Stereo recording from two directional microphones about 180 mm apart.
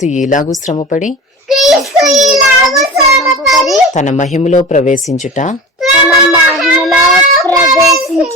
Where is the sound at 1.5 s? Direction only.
Centre (ahead or behind).